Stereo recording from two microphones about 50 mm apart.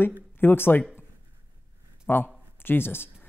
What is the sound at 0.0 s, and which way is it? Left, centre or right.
Speech, left.